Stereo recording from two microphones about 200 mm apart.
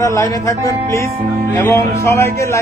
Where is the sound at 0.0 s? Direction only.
15° left (ahead or behind).